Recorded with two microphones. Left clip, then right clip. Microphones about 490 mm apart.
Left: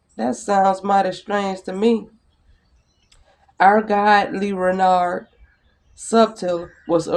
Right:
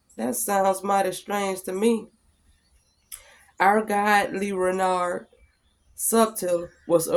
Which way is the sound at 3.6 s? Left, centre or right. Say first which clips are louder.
Left 6 dB; right.